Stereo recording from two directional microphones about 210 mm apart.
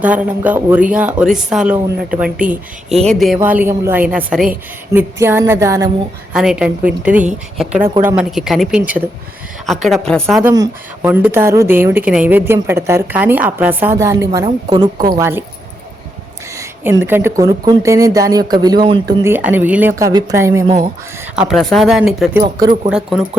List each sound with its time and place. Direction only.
0.0 s a woman's voice: 5° right (ahead or behind)
6.3 s speech: 5° right (ahead or behind)
10.4 s a woman's voice: 15° right (ahead or behind)
15.1 s a woman's voice: 10° right (ahead or behind)
16.6 s a woman's voice: 15° right (ahead or behind)
21.3 s speech: centre (ahead or behind)